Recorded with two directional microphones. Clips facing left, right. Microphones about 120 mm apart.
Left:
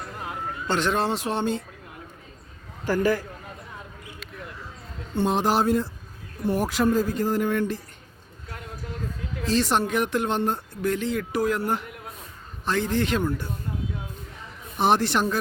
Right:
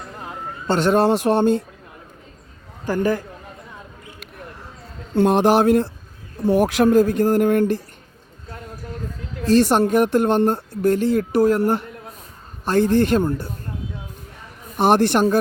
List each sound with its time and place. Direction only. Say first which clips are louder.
0.7 s speech: right 8 dB; 40° right (ahead or behind)
2.8 s a man's voice: right 2 dB; 15° right (ahead or behind)
5.1 s speech: right 7 dB; 65° right (ahead or behind)
9.5 s speech: right 8 dB; 50° right (ahead or behind)
12.6 s speech: right 8 dB; 50° right (ahead or behind)
14.8 s speech: right 6 dB; 50° right (ahead or behind)